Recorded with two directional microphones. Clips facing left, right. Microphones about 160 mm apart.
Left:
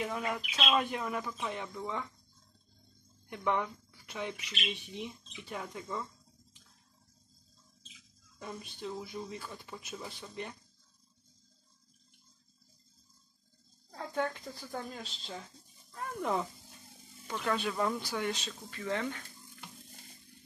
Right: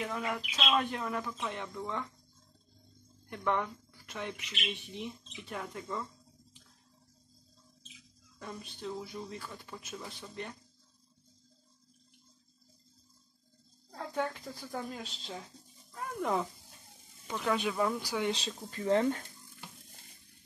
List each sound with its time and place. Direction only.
0.0 s speech: 5° left (ahead or behind)
3.3 s speech: 10° left (ahead or behind)
8.4 s speech: 5° left (ahead or behind)
13.9 s speech: centre (ahead or behind)
18.3 s speech: 30° right (ahead or behind)